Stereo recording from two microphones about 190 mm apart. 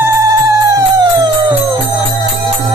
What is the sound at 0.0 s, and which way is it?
Music, 15° right (ahead or behind).